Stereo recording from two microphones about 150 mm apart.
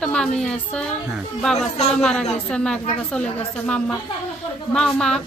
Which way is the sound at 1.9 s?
5° left (ahead or behind).